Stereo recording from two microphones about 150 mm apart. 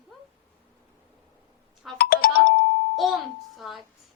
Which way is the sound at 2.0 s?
90° left.